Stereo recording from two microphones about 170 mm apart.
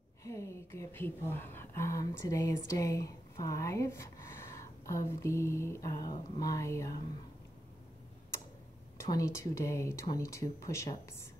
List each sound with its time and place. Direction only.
0.2 s a woman's voice: 15° left (ahead or behind)
8.9 s speech: 20° left (ahead or behind)